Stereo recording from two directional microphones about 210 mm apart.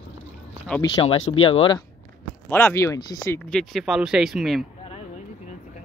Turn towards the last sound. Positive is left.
turn(degrees=0)  # may be behind; listen again after turning